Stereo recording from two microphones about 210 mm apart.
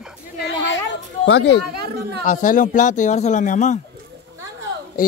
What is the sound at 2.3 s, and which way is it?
Speech, 40° left (ahead or behind).